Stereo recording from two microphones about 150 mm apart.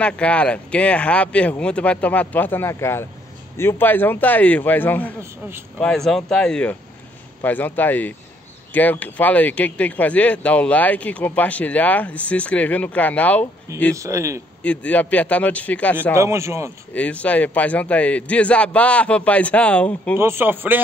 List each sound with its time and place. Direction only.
0.0 s speech: 10° left (ahead or behind)
13.9 s a man's voice: 20° right (ahead or behind)
14.6 s speech: 10° left (ahead or behind)
16.2 s a man's voice: 20° right (ahead or behind)
16.9 s speech: 10° left (ahead or behind)
20.2 s a man's voice: 15° right (ahead or behind)